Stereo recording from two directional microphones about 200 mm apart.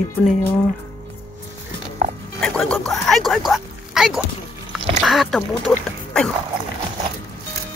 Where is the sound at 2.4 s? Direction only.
5° left (ahead or behind).